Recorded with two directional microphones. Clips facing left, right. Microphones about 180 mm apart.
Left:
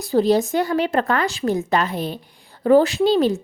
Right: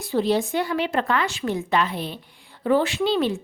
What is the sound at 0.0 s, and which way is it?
Speech, 40° left (ahead or behind).